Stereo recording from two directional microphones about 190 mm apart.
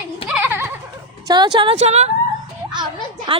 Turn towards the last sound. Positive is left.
turn(degrees=-25)  # may be behind; listen again after turning